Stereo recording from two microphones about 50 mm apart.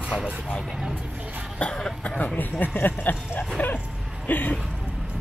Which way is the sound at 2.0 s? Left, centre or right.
Left.